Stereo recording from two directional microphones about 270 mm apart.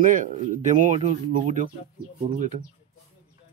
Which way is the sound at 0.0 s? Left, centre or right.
Right.